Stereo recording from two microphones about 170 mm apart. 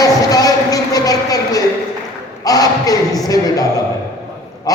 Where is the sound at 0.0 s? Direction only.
20° left (ahead or behind).